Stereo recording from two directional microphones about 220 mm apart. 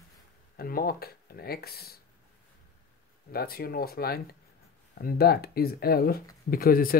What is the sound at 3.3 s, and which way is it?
Speech, 45° left (ahead or behind).